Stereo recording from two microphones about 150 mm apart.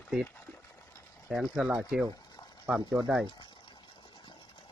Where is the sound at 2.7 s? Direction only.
20° right (ahead or behind).